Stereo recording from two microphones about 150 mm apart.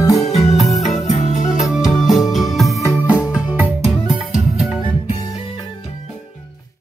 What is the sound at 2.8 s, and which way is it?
Music, 20° left (ahead or behind).